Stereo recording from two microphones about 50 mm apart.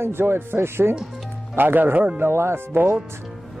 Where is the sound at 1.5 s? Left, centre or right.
Right.